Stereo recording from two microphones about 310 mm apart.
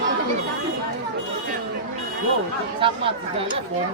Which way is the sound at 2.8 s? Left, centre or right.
Centre.